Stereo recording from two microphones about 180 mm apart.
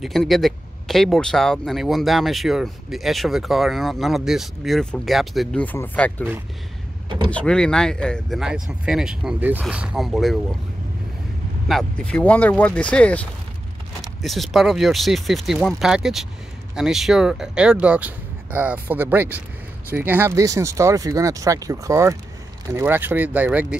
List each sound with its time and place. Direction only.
0.0 s speech: centre (ahead or behind)
7.2 s speech: 5° left (ahead or behind)
11.6 s speech: 5° left (ahead or behind)